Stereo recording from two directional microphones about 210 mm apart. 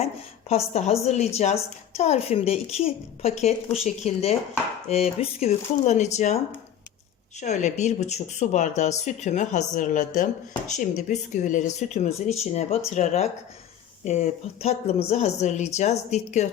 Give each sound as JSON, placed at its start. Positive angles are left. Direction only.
{"t": 0.0, "sound": "a woman's voice", "side_deg": 30}